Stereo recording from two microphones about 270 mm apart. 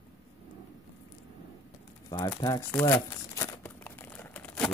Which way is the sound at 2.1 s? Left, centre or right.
Centre.